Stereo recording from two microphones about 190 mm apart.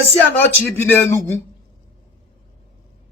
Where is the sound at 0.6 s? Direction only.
10° left (ahead or behind).